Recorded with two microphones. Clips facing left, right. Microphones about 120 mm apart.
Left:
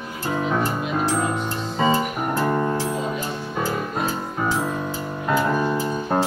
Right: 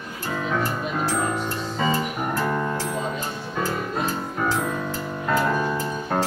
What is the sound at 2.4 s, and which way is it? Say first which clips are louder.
Music: left 4 dB; 25° left (ahead or behind).